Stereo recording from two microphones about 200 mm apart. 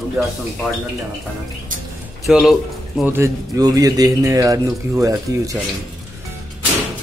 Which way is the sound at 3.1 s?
15° right (ahead or behind).